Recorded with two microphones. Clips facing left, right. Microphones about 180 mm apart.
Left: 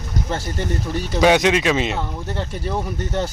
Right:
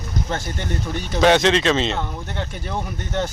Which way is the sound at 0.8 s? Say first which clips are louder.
Even; 5° left (ahead or behind).